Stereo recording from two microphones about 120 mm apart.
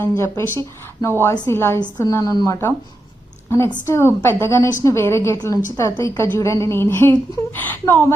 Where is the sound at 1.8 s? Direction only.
35° left (ahead or behind).